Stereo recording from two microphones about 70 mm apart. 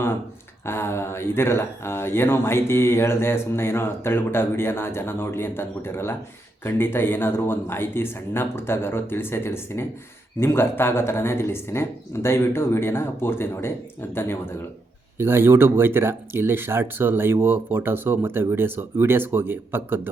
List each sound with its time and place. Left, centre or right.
0.6 s speech: left
15.2 s speech: right